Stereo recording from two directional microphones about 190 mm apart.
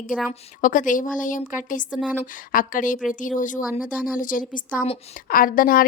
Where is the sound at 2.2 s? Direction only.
45° left (ahead or behind).